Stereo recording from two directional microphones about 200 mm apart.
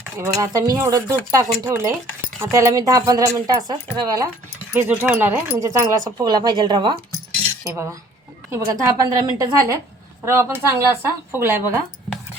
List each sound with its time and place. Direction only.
0.2 s speech: 15° right (ahead or behind)